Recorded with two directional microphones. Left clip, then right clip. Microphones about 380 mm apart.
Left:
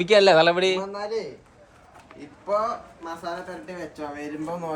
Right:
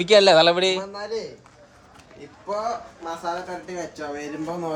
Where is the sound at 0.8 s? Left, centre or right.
Left.